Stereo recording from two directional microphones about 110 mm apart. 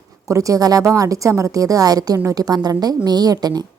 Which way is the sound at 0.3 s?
30° right (ahead or behind).